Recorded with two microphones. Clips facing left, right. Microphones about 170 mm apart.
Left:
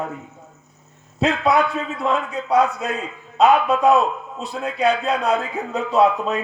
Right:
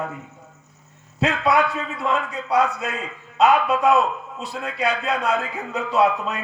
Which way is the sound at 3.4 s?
25° left (ahead or behind).